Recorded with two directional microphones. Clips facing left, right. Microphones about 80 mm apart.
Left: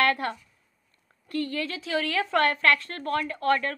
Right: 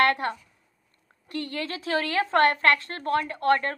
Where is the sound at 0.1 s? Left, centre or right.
Right.